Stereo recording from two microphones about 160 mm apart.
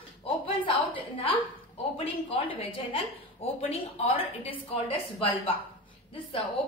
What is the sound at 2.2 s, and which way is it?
A woman's voice, 35° left (ahead or behind).